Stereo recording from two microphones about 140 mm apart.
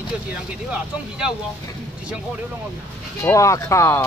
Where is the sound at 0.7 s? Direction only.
5° right (ahead or behind).